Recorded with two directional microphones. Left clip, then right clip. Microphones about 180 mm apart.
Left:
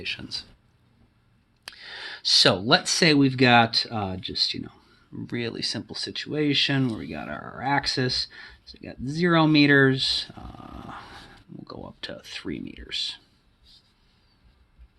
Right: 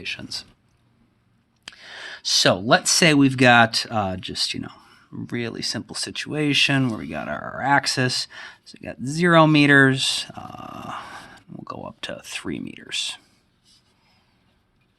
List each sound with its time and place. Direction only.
0.0 s speech: 20° right (ahead or behind)
1.7 s speech: 25° right (ahead or behind); by 5.2 s 45° right (ahead or behind)
5.2 s speech: 35° right (ahead or behind)